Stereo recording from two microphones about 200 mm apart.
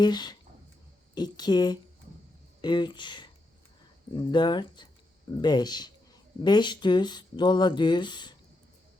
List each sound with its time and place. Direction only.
0.0 s speech: 20° left (ahead or behind)